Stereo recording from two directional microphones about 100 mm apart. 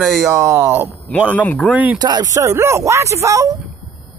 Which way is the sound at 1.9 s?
40° right (ahead or behind).